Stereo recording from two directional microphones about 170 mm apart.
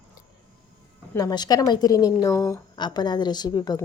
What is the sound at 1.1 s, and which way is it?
A woman's voice, 20° left (ahead or behind).